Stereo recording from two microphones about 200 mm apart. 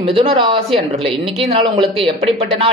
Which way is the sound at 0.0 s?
25° right (ahead or behind).